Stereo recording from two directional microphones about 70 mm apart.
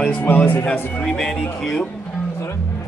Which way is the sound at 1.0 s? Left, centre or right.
Centre.